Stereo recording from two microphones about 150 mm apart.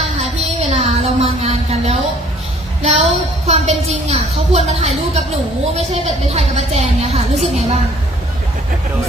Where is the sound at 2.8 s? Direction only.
45° right (ahead or behind).